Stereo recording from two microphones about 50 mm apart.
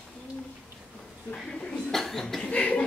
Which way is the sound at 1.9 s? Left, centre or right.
Centre.